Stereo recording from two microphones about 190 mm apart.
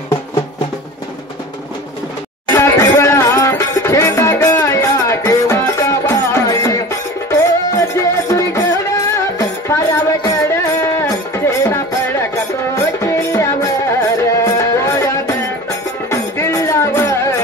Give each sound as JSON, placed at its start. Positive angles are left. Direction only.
{"t": 2.5, "sound": "music", "side_deg": 15}